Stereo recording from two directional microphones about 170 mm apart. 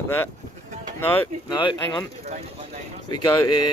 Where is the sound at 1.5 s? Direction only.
25° left (ahead or behind).